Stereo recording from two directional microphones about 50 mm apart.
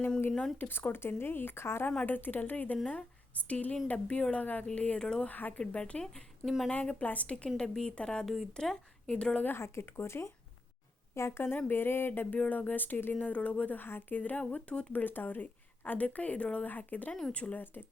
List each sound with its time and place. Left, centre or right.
0.6 s speech: left
2.0 s a woman's voice: left; by 5.3 s centre
5.3 s a woman's voice: left; by 6.5 s centre
6.7 s a woman's voice: left
7.3 s a woman's voice: left
8.2 s speech: centre
9.0 s a woman's voice: centre
9.6 s a woman's voice: left
13.1 s a woman's voice: left
13.7 s speech: left
14.2 s a woman's voice: left
14.9 s a woman's voice: left